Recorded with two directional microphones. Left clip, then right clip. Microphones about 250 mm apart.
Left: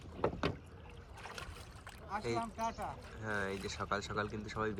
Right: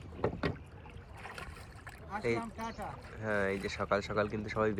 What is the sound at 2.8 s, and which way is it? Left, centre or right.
Speech, centre.